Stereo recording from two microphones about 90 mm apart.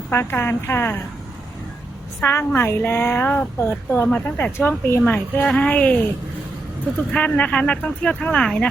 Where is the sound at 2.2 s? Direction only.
25° left (ahead or behind).